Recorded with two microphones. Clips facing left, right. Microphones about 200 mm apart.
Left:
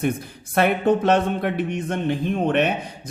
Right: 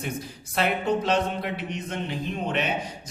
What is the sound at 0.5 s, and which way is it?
Speech, 55° left (ahead or behind).